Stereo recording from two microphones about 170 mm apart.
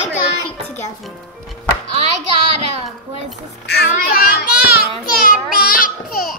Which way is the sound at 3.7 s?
65° left (ahead or behind).